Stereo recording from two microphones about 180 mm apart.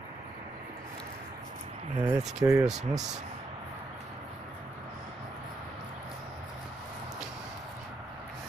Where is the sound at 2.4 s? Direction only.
20° right (ahead or behind).